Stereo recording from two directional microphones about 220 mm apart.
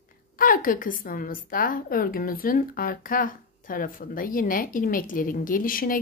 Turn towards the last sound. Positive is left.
turn(degrees=40)  # may be behind; listen again after turning